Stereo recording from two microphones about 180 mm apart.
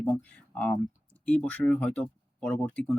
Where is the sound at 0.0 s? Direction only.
5° left (ahead or behind).